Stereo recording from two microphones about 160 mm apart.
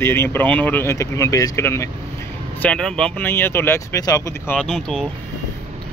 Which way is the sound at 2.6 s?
5° left (ahead or behind).